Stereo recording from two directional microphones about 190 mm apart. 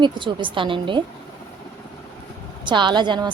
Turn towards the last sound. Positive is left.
turn(degrees=-25)  # may be behind; listen again after turning